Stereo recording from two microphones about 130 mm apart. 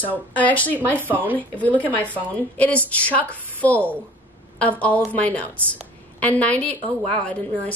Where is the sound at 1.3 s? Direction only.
10° left (ahead or behind).